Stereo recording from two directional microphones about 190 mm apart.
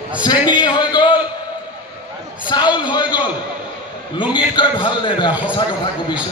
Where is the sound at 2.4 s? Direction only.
25° left (ahead or behind).